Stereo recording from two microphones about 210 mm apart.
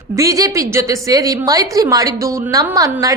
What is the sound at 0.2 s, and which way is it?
A woman's voice, 15° right (ahead or behind).